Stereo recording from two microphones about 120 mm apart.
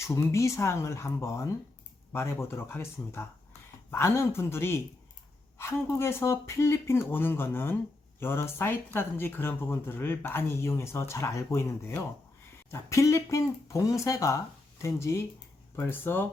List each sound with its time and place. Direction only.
0.0 s speech: 25° left (ahead or behind)